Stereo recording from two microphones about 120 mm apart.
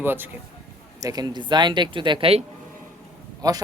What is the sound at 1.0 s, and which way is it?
Speech, 35° right (ahead or behind).